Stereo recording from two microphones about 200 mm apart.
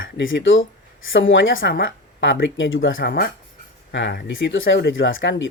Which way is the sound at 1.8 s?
65° left (ahead or behind).